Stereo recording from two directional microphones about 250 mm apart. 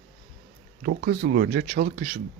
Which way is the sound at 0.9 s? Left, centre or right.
Right.